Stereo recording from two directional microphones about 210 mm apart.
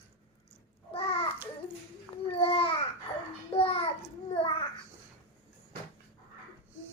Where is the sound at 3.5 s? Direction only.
30° left (ahead or behind).